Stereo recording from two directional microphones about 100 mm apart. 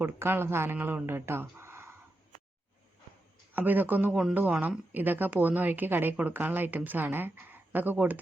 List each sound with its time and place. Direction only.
0.0 s speech: 20° right (ahead or behind)
3.5 s speech: 20° right (ahead or behind)